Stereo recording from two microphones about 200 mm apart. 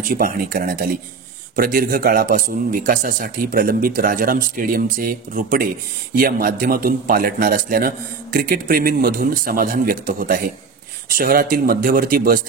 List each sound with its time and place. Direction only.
0.0 s speech: 45° right (ahead or behind)